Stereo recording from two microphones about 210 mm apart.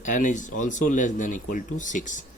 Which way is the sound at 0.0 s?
35° left (ahead or behind).